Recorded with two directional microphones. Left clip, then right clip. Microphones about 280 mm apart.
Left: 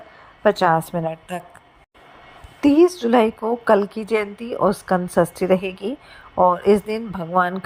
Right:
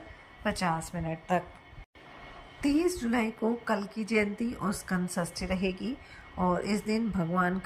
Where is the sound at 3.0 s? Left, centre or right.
Left.